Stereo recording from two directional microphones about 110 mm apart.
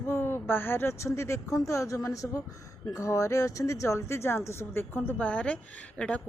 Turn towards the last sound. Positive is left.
turn(degrees=10)  # may be behind; listen again after turning